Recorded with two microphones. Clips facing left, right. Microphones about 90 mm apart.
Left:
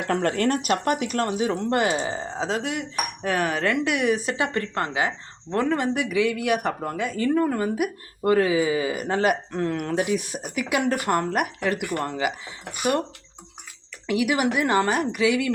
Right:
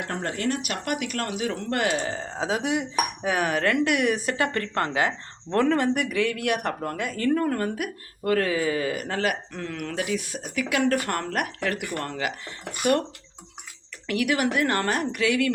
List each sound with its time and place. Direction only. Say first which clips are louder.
0.1 s speech: left 11 dB; 90° left
0.3 s speech: left 5 dB; 45° left (ahead or behind); by 2.3 s 15° left (ahead or behind)
2.3 s speech: right 1 dB; centre (ahead or behind)
2.6 s dishes: right 2 dB; 15° right (ahead or behind)
3.2 s speech: left 2 dB; 5° right (ahead or behind)
4.5 s speech: even; 20° left (ahead or behind)
5.9 s speech: left 2 dB; 5° left (ahead or behind); by 10.2 s 25° left (ahead or behind)
10.4 s speech: right 3 dB; 15° left (ahead or behind)
14.1 s speech: left 2 dB; 10° left (ahead or behind)